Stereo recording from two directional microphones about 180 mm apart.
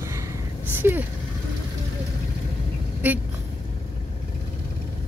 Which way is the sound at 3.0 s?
10° right (ahead or behind).